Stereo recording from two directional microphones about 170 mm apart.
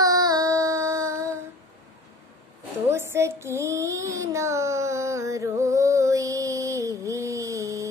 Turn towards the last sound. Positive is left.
turn(degrees=-20)  # may be behind; listen again after turning